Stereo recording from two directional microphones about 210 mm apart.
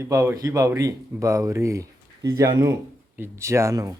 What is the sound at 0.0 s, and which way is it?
Speech, 15° right (ahead or behind).